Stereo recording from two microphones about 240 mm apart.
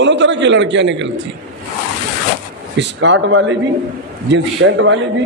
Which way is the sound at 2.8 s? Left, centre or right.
Right.